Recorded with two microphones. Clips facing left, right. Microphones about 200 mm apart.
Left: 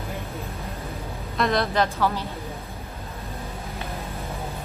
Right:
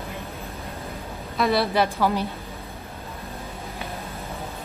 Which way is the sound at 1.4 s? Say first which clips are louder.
Right 1 dB; 5° right (ahead or behind).